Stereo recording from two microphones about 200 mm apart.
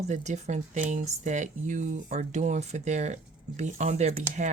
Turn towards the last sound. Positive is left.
turn(degrees=-35)  # may be behind; listen again after turning